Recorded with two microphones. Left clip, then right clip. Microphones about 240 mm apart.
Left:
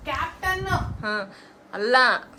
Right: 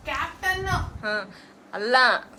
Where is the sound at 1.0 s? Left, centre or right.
Centre.